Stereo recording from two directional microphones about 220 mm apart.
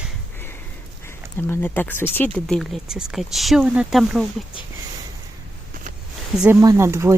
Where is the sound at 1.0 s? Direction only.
10° left (ahead or behind).